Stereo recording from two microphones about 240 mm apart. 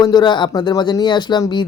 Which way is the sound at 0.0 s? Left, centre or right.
Centre.